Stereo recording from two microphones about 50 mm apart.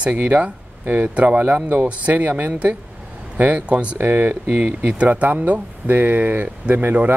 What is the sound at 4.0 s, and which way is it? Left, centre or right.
Speech, right.